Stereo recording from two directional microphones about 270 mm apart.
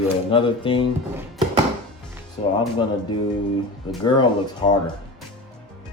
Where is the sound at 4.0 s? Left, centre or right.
Centre.